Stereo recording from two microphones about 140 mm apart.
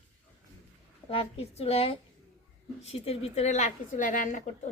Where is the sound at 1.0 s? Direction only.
45° left (ahead or behind).